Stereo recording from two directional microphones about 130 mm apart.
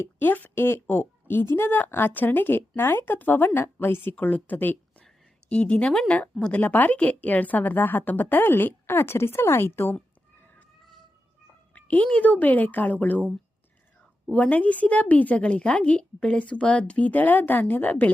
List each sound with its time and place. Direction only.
0.0 s speech: 15° left (ahead or behind)
11.7 s speech: 10° left (ahead or behind)
14.3 s speech: 10° left (ahead or behind)